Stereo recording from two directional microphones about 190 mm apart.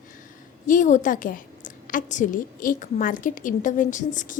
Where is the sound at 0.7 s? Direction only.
40° left (ahead or behind).